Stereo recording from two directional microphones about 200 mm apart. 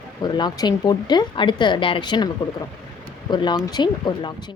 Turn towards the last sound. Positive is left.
turn(degrees=20)  # may be behind; listen again after turning